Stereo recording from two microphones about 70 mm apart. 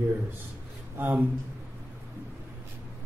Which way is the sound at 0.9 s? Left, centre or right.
Right.